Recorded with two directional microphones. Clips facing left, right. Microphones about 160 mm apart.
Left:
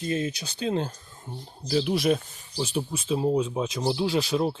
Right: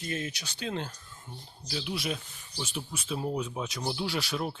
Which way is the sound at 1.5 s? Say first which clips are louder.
Left 11 dB; 45° left (ahead or behind).